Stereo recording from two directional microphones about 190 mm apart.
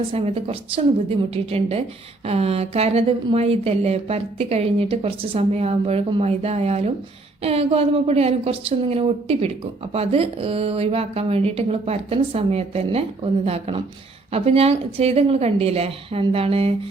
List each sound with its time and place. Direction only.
0.1 s speech: 30° right (ahead or behind)